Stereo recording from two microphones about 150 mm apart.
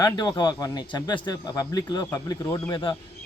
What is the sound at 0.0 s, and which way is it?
Speech, 30° left (ahead or behind).